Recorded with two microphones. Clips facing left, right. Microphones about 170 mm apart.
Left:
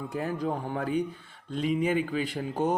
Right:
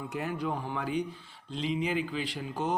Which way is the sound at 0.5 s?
50° left (ahead or behind).